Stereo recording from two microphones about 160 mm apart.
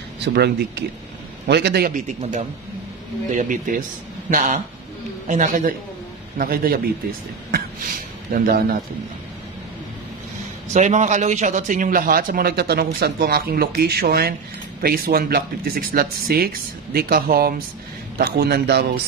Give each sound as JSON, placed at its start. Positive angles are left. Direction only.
{"t": 0.2, "sound": "speech", "side_deg": -90}
{"t": 1.9, "sound": "a man's voice", "side_deg": -50}
{"t": 8.3, "sound": "speech", "side_deg": -65}
{"t": 10.7, "sound": "a man's voice", "side_deg": -50}